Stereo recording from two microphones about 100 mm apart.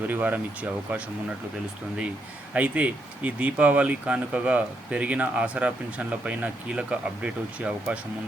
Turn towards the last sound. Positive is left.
turn(degrees=-10)  # may be behind; listen again after turning